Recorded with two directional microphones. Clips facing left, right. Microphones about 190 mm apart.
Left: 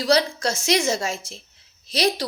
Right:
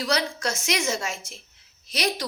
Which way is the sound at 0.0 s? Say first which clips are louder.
Left 6 dB; 30° left (ahead or behind).